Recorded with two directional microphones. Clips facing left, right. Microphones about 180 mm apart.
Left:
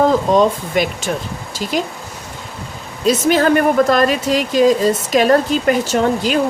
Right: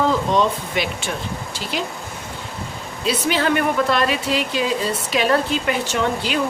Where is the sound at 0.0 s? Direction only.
45° left (ahead or behind).